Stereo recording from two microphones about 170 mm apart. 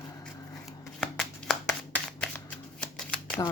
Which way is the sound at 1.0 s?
Centre (ahead or behind).